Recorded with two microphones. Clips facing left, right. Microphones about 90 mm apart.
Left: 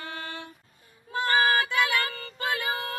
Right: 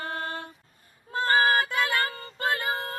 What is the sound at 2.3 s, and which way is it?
Music, 40° right (ahead or behind).